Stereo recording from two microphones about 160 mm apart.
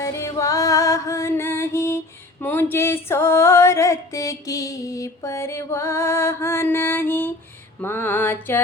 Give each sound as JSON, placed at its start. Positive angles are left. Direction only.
{"t": 0.0, "sound": "music", "side_deg": 20}